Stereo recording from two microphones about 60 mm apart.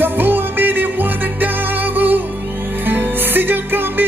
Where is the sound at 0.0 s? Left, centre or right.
Right.